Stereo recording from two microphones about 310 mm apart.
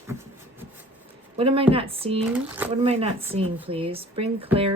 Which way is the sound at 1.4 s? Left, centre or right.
Centre.